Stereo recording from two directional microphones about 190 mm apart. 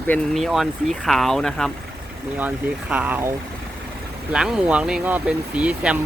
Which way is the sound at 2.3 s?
10° right (ahead or behind).